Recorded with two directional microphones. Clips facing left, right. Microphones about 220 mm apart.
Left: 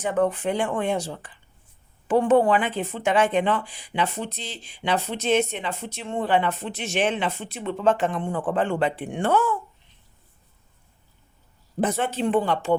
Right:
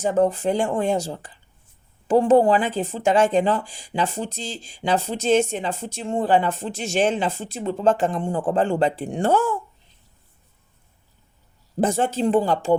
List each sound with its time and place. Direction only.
0.1 s speech: 40° right (ahead or behind)
2.2 s a woman's voice: 25° right (ahead or behind)
2.5 s speech: 40° right (ahead or behind)
7.1 s speech: 30° right (ahead or behind)
11.8 s speech: 45° right (ahead or behind)